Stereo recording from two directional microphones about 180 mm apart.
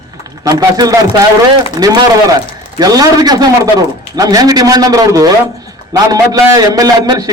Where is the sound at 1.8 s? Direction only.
20° right (ahead or behind).